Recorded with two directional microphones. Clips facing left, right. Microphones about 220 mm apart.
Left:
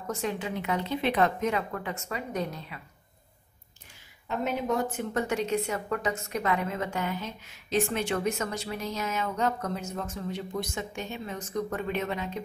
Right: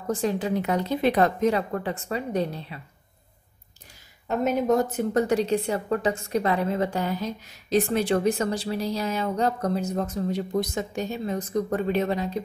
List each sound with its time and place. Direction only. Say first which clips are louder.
0.0 s a woman's voice: right 6 dB; 35° right (ahead or behind)
4.3 s a woman's voice: right 7 dB; 40° right (ahead or behind)